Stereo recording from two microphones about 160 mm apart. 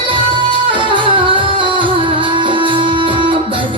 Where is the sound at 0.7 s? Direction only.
30° right (ahead or behind).